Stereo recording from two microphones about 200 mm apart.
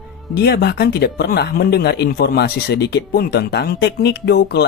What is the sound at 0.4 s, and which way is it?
Speech, 55° left (ahead or behind).